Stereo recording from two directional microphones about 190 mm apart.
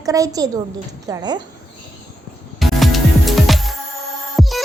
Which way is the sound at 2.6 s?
Centre (ahead or behind).